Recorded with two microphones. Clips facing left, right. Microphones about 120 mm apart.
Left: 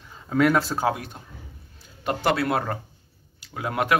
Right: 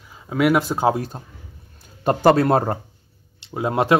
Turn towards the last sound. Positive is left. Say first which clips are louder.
# right 6 dB
turn(degrees=-25)  # may be behind; listen again after turning